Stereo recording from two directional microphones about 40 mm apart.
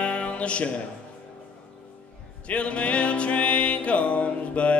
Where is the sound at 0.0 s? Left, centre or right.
Left.